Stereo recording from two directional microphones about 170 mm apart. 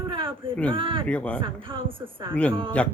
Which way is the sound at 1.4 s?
30° right (ahead or behind).